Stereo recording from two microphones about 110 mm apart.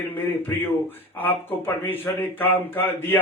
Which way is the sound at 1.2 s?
20° left (ahead or behind).